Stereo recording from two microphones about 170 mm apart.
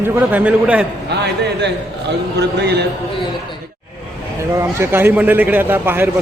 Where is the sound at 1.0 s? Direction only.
85° right.